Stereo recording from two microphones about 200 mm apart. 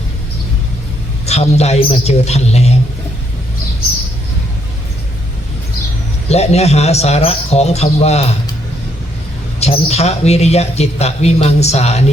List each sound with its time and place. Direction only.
1.3 s speech: 35° left (ahead or behind)
6.2 s speech: 30° left (ahead or behind)
9.6 s speech: 30° left (ahead or behind)